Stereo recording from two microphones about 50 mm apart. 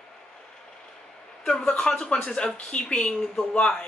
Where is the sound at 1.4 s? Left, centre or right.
Centre.